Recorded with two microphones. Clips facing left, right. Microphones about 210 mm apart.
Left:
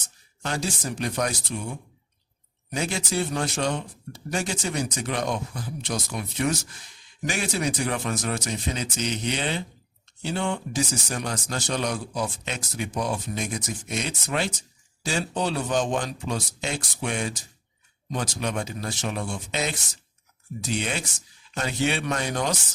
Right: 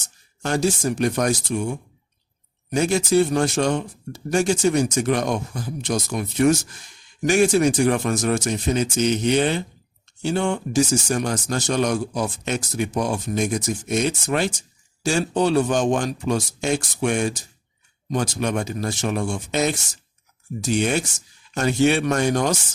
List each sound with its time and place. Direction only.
0.4 s a man's voice: 45° right (ahead or behind)
2.7 s a man's voice: 45° right (ahead or behind)